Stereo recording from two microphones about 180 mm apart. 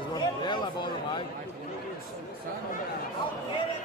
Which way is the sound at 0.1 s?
25° left (ahead or behind).